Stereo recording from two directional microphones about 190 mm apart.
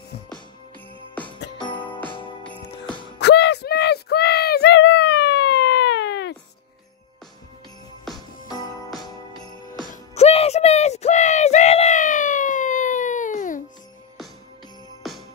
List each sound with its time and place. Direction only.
1.6 s music: 25° left (ahead or behind)
3.2 s a sound: 65° left (ahead or behind)
8.5 s jingle bell: 20° left (ahead or behind)
9.8 s music: 35° left (ahead or behind)
15.0 s jingle bell: centre (ahead or behind)